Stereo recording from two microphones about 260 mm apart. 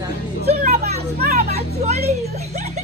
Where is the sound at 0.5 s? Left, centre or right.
Right.